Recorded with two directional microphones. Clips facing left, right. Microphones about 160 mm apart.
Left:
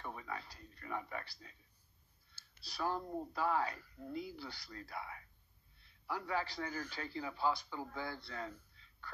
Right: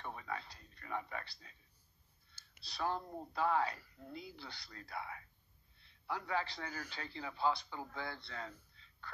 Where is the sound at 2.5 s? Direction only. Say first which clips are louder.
Even; 25° right (ahead or behind).